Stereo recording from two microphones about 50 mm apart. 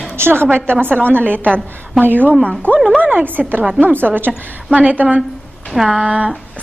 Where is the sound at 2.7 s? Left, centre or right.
Left.